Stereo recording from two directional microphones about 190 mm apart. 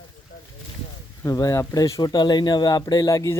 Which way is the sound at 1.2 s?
20° left (ahead or behind).